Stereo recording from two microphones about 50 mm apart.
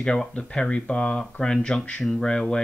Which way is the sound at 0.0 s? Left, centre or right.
Centre.